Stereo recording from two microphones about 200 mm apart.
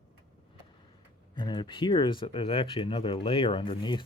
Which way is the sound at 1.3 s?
20° left (ahead or behind).